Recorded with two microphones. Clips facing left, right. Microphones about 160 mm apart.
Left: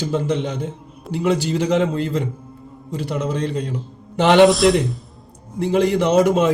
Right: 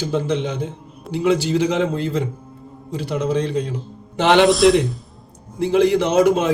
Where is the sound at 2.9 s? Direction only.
45° left (ahead or behind).